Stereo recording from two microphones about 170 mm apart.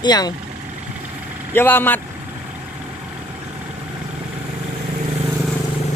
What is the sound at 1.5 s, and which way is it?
Speech, 10° left (ahead or behind).